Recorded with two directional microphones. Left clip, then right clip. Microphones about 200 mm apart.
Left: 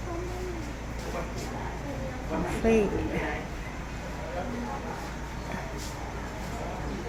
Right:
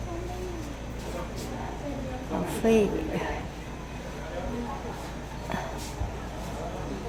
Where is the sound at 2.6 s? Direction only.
15° right (ahead or behind).